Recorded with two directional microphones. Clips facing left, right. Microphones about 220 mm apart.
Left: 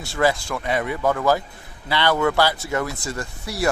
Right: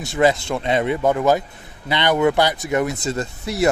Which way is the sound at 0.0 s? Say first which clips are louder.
Right 4 dB; 20° right (ahead or behind).